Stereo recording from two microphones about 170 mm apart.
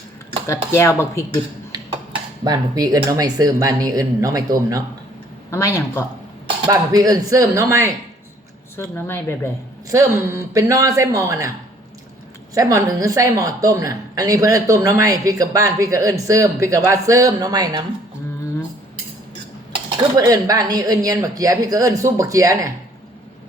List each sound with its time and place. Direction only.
0.4 s speech: 15° left (ahead or behind)
2.4 s a woman's voice: 20° right (ahead or behind)
5.5 s speech: 15° left (ahead or behind)
6.7 s a woman's voice: 20° right (ahead or behind)
8.7 s speech: 15° left (ahead or behind)
9.9 s a woman's voice: 20° right (ahead or behind)
12.5 s a woman's voice: 20° right (ahead or behind)
20.1 s a woman's voice: 20° right (ahead or behind)